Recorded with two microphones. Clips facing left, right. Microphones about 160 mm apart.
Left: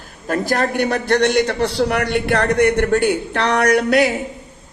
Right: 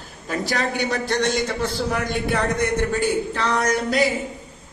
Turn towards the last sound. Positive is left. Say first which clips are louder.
# left 6 dB
turn(degrees=70)  # may be behind; listen again after turning